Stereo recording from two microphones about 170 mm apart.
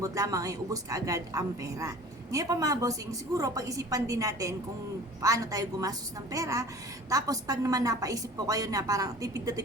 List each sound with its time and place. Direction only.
0.0 s a woman's voice: 20° right (ahead or behind)